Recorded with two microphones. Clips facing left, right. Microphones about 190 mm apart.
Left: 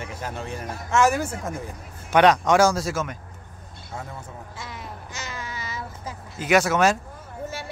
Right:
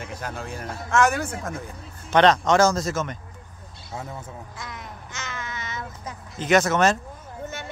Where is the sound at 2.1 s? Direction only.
10° left (ahead or behind).